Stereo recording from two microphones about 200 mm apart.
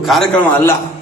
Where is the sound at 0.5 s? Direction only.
10° left (ahead or behind).